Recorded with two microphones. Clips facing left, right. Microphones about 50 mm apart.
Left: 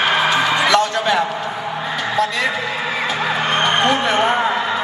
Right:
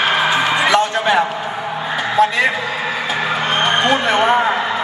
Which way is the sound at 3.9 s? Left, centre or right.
Right.